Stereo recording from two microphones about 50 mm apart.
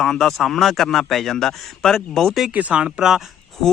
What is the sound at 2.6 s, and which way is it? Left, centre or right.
Speech, right.